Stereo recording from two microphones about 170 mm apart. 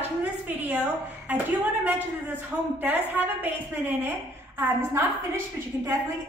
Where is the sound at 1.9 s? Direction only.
10° right (ahead or behind).